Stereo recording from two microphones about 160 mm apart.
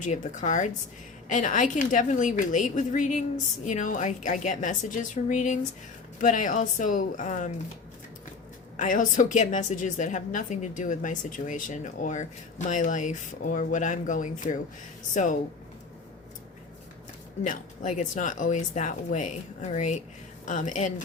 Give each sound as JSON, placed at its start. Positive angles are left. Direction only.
{"t": 0.0, "sound": "a woman's voice", "side_deg": 50}
{"t": 8.7, "sound": "a woman's voice", "side_deg": 55}
{"t": 17.4, "sound": "a woman's voice", "side_deg": 50}